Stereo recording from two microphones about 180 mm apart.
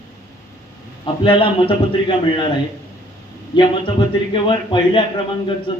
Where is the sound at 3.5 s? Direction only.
30° left (ahead or behind).